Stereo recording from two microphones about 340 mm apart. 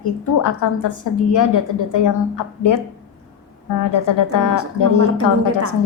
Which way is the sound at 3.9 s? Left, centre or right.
Left.